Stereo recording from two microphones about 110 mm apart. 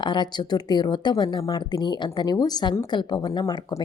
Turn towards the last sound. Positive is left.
turn(degrees=40)  # may be behind; listen again after turning